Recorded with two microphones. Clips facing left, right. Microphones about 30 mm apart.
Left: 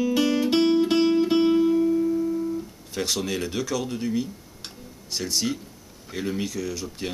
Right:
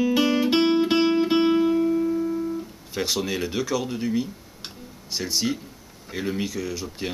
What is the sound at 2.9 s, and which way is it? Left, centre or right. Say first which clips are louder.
Speech: right 1 dB; centre.